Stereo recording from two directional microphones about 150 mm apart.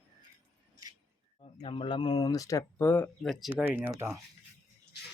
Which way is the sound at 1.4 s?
35° left (ahead or behind).